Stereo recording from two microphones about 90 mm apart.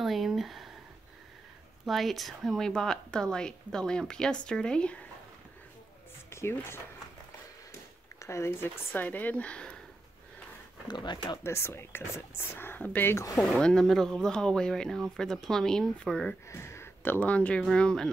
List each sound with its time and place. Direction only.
0.0 s speech: centre (ahead or behind)
1.9 s speech: centre (ahead or behind)
6.3 s speech: 30° left (ahead or behind)
8.2 s speech: 30° left (ahead or behind); by 9.8 s 15° left (ahead or behind)
10.9 s speech: 55° left (ahead or behind)
11.4 s speech: 30° left (ahead or behind)
13.4 s speech: 5° left (ahead or behind)
16.4 s speech: 30° left (ahead or behind); by 18.1 s 10° left (ahead or behind)